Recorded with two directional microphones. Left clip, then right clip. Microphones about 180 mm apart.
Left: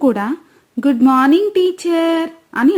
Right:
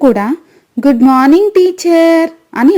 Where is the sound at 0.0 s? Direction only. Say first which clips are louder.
Right 6 dB; 25° right (ahead or behind).